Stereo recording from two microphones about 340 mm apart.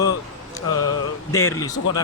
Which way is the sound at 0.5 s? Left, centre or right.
Centre.